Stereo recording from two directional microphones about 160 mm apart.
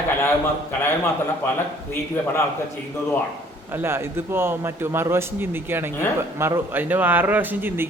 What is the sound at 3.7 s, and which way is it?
A man's voice, 15° right (ahead or behind).